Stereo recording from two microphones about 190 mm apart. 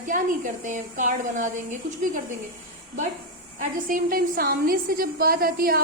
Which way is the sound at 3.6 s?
45° right (ahead or behind).